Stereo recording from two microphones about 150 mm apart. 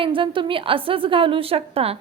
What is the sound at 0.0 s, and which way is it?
A woman's voice, 35° right (ahead or behind).